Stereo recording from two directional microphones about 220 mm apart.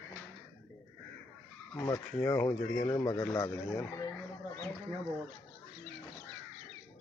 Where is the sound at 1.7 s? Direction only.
15° left (ahead or behind).